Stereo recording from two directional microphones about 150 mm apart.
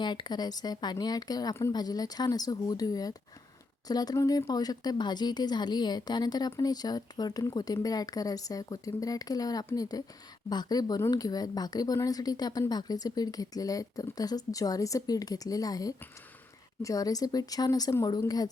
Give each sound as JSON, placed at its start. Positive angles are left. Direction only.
{"t": 0.0, "sound": "speech", "side_deg": 30}